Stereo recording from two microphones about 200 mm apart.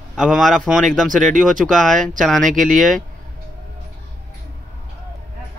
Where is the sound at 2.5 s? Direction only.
40° right (ahead or behind).